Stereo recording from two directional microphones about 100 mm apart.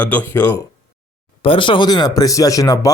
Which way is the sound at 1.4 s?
60° left (ahead or behind).